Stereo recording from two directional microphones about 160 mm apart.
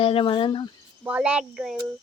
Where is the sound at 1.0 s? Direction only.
10° right (ahead or behind).